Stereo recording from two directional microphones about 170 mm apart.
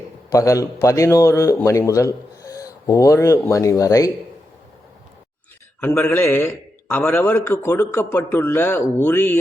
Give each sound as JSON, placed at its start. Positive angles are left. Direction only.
{"t": 0.3, "sound": "a man's voice", "side_deg": 20}
{"t": 5.8, "sound": "a man's voice", "side_deg": 15}